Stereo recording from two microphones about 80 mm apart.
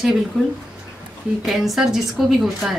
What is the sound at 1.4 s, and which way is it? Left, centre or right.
A woman's voice, centre.